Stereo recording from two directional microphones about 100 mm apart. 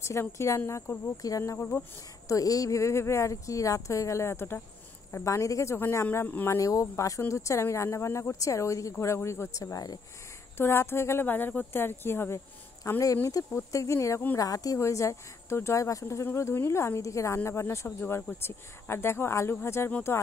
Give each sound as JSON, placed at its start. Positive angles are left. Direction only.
{"t": 0.0, "sound": "speech", "side_deg": 30}
{"t": 6.5, "sound": "speech", "side_deg": 35}
{"t": 10.6, "sound": "speech", "side_deg": 25}